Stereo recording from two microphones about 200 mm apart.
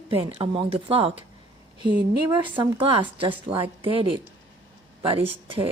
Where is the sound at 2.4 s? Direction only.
25° right (ahead or behind).